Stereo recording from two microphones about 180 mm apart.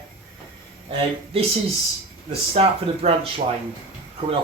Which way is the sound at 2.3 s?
35° right (ahead or behind).